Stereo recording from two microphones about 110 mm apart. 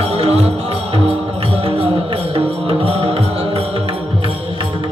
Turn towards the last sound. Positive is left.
turn(degrees=-60)  # may be behind; listen again after turning